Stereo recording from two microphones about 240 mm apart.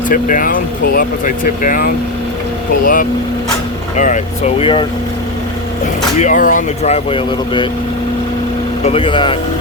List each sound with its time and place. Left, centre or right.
0.1 s speech: left
6.1 s speech: left
8.8 s speech: left